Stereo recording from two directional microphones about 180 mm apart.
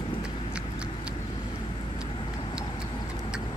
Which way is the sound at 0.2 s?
5° right (ahead or behind).